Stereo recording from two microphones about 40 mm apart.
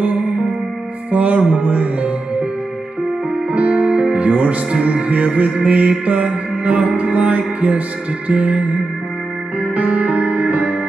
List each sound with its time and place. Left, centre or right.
1.1 s music: right
3.5 s music: right